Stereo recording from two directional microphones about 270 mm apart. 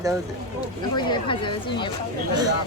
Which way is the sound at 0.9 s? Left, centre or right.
Centre.